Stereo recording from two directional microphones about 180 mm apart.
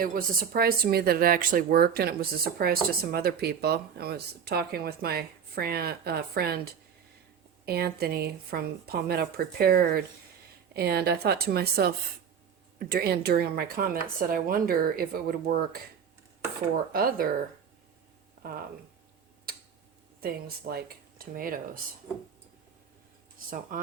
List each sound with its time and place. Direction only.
0.0 s speech: 50° right (ahead or behind)
7.6 s speech: 60° right (ahead or behind)
16.9 s speech: 55° right (ahead or behind)
18.4 s a sound: 50° right (ahead or behind)
20.2 s speech: 60° right (ahead or behind)
23.7 s speech: 50° right (ahead or behind)